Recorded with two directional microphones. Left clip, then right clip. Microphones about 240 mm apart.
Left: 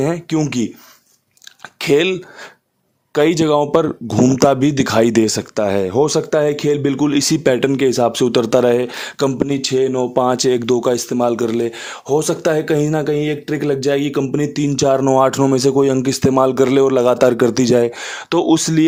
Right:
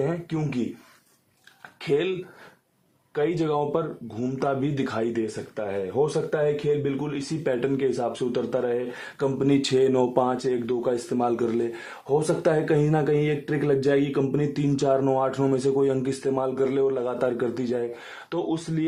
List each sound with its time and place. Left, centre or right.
0.0 s speech: left
1.8 s speech: left
3.2 s speech: left
9.6 s speech: left
10.2 s speech: left
11.1 s speech: left